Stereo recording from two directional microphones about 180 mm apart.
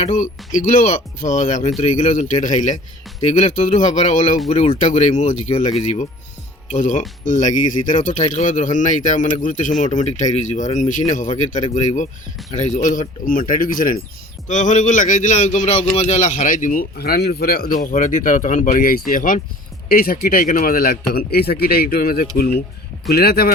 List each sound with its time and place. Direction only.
0.1 s speech: 40° left (ahead or behind)
17.8 s speech: 45° left (ahead or behind)